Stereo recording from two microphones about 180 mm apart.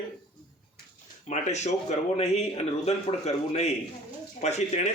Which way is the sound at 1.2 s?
40° left (ahead or behind).